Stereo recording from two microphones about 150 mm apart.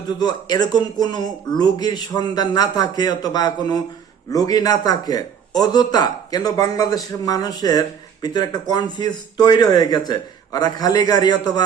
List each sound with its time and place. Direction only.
0.2 s a man's voice: 25° left (ahead or behind)